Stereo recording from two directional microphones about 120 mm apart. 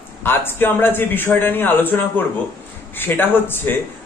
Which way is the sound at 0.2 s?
20° left (ahead or behind).